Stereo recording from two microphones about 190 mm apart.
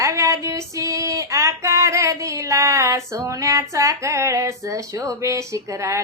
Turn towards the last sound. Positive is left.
turn(degrees=-15)  # may be behind; listen again after turning